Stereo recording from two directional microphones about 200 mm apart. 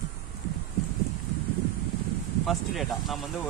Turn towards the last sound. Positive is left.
turn(degrees=0)  # may be behind; listen again after turning